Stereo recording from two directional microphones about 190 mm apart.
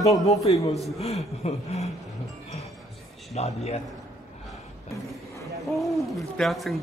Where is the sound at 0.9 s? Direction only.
35° left (ahead or behind).